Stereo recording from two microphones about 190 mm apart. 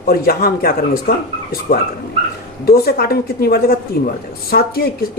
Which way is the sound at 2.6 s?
55° left (ahead or behind).